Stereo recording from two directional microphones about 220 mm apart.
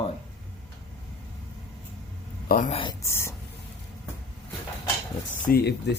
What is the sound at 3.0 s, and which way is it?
Speech, 10° left (ahead or behind).